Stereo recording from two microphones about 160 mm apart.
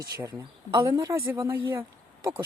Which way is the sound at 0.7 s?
20° right (ahead or behind).